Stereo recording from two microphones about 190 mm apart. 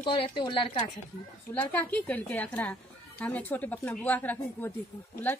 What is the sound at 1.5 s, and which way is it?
A woman's voice, 10° left (ahead or behind).